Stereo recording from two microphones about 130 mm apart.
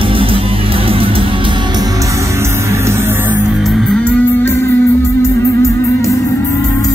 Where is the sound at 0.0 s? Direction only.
45° right (ahead or behind).